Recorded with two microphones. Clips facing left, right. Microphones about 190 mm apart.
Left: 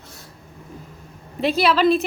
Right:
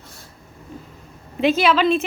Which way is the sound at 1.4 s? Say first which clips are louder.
Right 2 dB; 35° left (ahead or behind).